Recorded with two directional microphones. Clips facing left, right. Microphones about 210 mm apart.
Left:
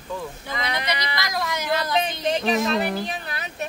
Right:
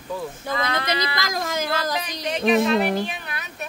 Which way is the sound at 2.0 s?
30° left (ahead or behind).